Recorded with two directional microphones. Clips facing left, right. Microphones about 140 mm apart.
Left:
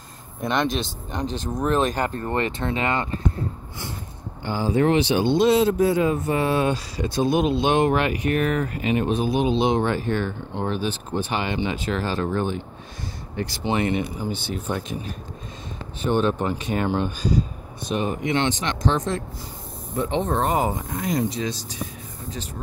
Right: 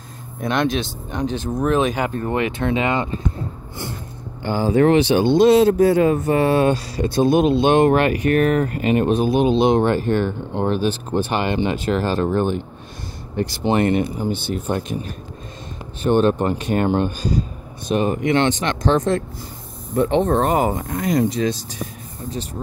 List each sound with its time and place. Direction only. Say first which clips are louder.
0.4 s speech: right 3 dB; centre (ahead or behind)
4.5 s speech: right 5 dB; 60° right (ahead or behind)
7.3 s speech: right 5 dB; 5° left (ahead or behind)
7.6 s speech: right 5 dB; 55° right (ahead or behind)
10.8 s speech: right 6 dB; 80° right; by 12.2 s 60° right (ahead or behind)
13.7 s speech: right 5 dB; 50° right (ahead or behind)
16.0 s speech: right 5 dB; 65° right (ahead or behind)